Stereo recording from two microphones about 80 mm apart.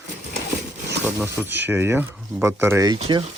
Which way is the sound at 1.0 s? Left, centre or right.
Right.